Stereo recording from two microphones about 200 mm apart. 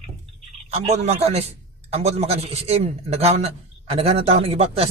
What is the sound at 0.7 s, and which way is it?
A man's voice, 30° right (ahead or behind).